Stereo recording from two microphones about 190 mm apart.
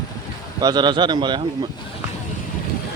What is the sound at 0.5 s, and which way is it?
Speech, 20° right (ahead or behind).